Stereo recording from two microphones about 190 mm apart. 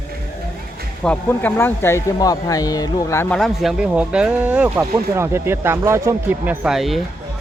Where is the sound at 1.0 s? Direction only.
10° left (ahead or behind).